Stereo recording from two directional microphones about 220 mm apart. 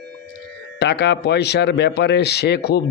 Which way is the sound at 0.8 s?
50° left (ahead or behind).